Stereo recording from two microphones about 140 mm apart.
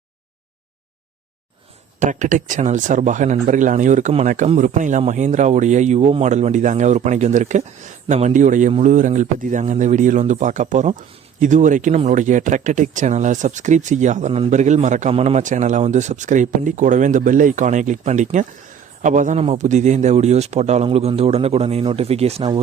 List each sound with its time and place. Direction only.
2.0 s a man's voice: 60° right (ahead or behind); by 22.4 s 45° right (ahead or behind)